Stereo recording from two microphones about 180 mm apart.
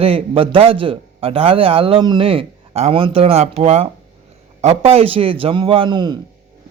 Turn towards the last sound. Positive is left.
turn(degrees=-25)  # may be behind; listen again after turning